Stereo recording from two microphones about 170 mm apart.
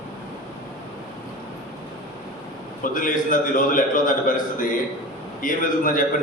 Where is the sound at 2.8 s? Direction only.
50° left (ahead or behind).